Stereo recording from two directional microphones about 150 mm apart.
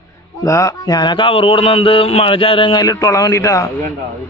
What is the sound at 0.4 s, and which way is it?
Speech, 20° left (ahead or behind).